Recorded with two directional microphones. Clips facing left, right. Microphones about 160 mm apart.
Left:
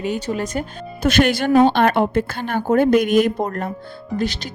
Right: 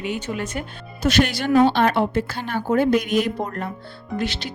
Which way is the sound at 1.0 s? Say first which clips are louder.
Left 3 dB; 55° left (ahead or behind).